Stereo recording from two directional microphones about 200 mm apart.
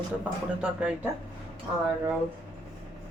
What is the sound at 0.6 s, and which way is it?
Speech, 5° right (ahead or behind).